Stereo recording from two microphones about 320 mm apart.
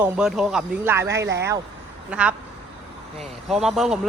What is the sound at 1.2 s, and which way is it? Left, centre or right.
Speech, right.